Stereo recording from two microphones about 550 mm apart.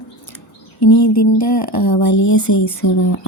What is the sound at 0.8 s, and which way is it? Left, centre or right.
Speech, left.